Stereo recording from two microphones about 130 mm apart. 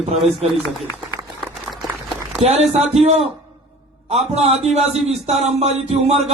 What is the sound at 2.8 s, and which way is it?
Speech, centre (ahead or behind).